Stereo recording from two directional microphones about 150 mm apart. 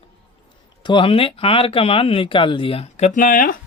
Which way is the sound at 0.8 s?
35° left (ahead or behind).